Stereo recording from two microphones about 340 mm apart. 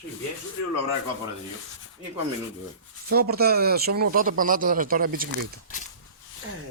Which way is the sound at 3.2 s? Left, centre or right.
Right.